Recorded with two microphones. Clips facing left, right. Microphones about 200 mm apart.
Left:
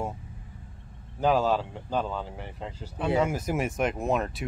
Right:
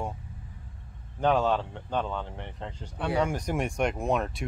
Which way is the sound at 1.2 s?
5° left (ahead or behind).